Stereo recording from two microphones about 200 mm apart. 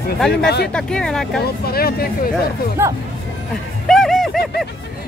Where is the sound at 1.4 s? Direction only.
50° left (ahead or behind).